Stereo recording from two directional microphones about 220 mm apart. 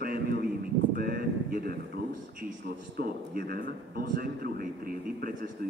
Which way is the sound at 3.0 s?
40° right (ahead or behind).